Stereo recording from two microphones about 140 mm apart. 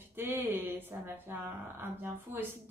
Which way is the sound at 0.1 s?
15° right (ahead or behind).